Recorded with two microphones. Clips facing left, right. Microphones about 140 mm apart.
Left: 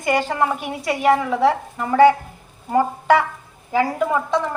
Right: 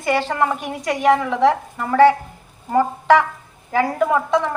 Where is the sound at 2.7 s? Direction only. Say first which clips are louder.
Right 1 dB; 10° left (ahead or behind).